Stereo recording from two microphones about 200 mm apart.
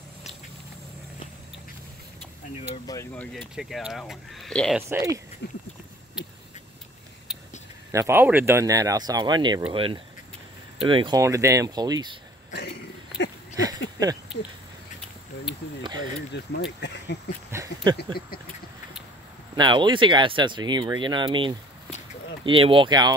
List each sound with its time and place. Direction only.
2.7 s speech: 20° left (ahead or behind)
3.1 s speech: 5° left (ahead or behind)
4.8 s speech: 15° right (ahead or behind)
5.4 s a sound: 60° left (ahead or behind)
7.9 s speech: 15° right (ahead or behind)
12.4 s a sound: 55° left (ahead or behind)
15.8 s speech: 20° right (ahead or behind)
16.5 s speech: 60° left (ahead or behind)
17.5 s speech: 15° right (ahead or behind)
17.9 s a sound: 50° left (ahead or behind)
19.5 s speech: 25° right (ahead or behind)